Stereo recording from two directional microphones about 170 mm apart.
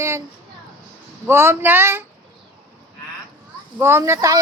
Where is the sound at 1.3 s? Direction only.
15° right (ahead or behind).